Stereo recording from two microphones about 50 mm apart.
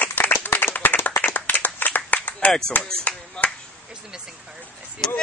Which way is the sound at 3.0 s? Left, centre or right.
Left.